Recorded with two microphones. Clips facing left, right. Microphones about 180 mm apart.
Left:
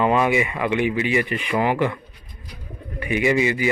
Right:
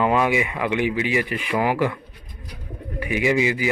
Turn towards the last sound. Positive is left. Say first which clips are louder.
# left 1 dB
turn(degrees=-10)  # may be behind; listen again after turning